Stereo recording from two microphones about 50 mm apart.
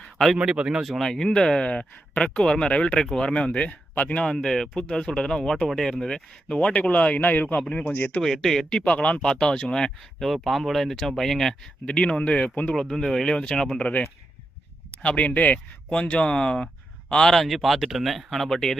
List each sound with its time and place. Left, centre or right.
0.0 s a sound: centre
0.3 s speech: centre
0.8 s speech: centre
1.7 s speech: left
4.2 s speech: centre; by 7.2 s left
7.2 s speech: left
7.7 s speech: left
8.2 s speech: centre
8.7 s speech: left
10.2 s speech: centre
11.9 s speech: centre
12.7 s speech: centre
15.0 s speech: left; by 18.8 s centre